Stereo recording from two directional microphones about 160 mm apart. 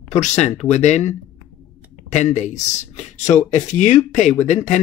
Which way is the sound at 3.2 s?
15° left (ahead or behind).